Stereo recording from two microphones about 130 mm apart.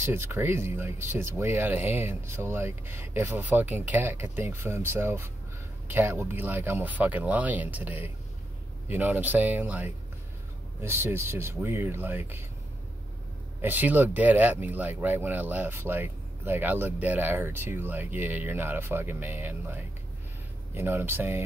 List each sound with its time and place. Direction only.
0.0 s speech: 15° right (ahead or behind)
13.6 s speech: 15° right (ahead or behind)